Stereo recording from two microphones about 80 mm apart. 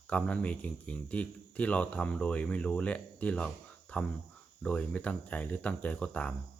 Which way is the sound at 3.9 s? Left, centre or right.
Centre.